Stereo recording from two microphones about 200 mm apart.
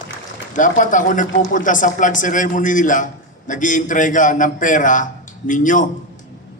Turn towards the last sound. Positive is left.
turn(degrees=40)  # may be behind; listen again after turning